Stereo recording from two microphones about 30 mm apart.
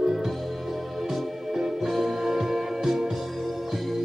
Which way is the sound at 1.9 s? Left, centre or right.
Centre.